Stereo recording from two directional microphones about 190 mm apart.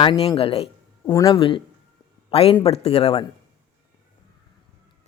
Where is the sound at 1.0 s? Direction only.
20° left (ahead or behind).